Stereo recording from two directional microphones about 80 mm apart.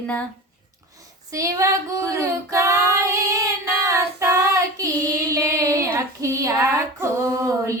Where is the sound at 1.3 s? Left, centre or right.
Right.